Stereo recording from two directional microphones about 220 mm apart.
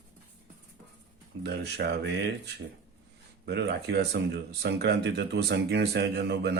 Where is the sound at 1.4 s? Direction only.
50° right (ahead or behind).